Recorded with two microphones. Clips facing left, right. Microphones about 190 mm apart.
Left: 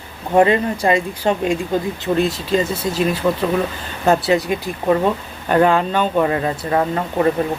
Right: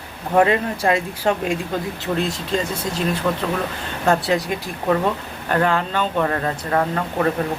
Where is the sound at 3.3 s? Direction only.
15° left (ahead or behind).